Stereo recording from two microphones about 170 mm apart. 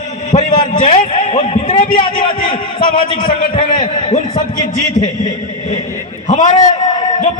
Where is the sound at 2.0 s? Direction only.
30° left (ahead or behind).